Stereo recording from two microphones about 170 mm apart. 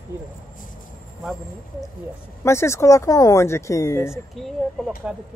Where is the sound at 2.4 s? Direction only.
15° left (ahead or behind).